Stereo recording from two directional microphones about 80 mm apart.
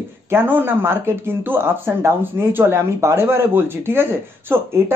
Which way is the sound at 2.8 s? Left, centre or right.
Right.